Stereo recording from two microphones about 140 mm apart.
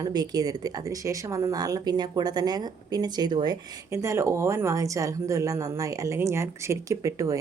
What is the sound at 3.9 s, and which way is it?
A woman's voice, 20° right (ahead or behind).